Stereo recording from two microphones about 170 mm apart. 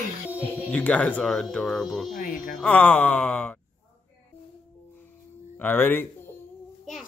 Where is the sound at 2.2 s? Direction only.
55° left (ahead or behind).